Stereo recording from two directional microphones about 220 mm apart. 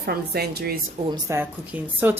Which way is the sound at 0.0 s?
45° right (ahead or behind).